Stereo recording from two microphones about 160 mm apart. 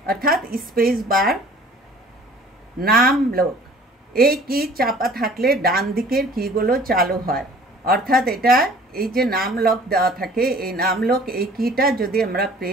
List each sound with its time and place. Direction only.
0.0 s a woman's voice: 65° right (ahead or behind)
2.8 s a woman's voice: 70° right (ahead or behind)